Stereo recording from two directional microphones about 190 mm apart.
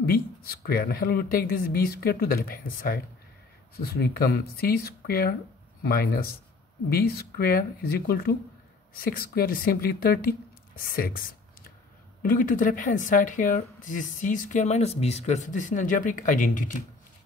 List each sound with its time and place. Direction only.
0.0 s speech: 55° left (ahead or behind)